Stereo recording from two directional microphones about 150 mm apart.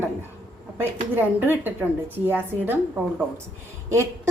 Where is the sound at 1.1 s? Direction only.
10° right (ahead or behind).